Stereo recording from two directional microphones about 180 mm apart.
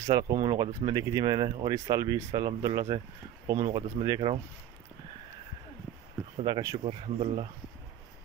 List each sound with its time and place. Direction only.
0.0 s speech: 25° right (ahead or behind)
0.6 s speech: 20° right (ahead or behind)
6.4 s speech: 20° right (ahead or behind)
6.8 s speech: 30° right (ahead or behind)